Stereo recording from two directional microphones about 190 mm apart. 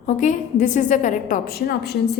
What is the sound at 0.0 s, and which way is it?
A woman's voice, 40° left (ahead or behind).